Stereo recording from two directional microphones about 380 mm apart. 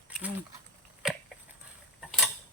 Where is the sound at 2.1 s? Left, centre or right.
Centre.